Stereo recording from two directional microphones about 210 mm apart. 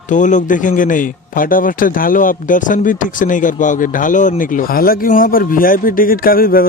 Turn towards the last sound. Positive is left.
turn(degrees=45)  # may be behind; listen again after turning